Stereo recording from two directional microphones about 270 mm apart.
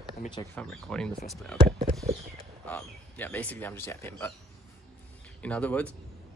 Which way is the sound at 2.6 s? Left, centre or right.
Centre.